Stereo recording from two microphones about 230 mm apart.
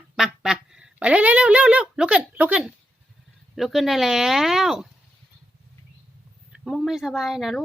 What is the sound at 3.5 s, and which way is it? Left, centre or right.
Speech, centre.